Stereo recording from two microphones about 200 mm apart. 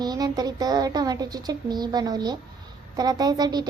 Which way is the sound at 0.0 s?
20° right (ahead or behind).